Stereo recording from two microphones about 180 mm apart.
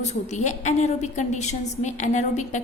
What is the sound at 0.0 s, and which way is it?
A woman's voice, 40° left (ahead or behind).